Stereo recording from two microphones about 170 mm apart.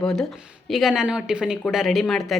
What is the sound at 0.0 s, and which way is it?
A woman's voice, 5° left (ahead or behind).